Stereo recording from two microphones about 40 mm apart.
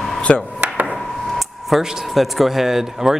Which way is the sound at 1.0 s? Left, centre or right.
Centre.